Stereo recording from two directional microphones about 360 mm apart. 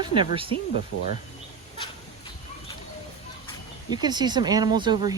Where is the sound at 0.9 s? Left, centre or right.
Left.